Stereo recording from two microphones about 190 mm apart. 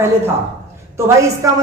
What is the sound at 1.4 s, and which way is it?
Speech, 15° right (ahead or behind).